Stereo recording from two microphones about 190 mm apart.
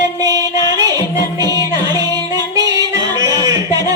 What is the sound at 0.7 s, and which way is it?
Music, 20° right (ahead or behind).